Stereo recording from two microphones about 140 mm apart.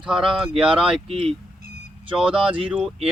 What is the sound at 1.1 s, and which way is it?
Speech, 40° right (ahead or behind).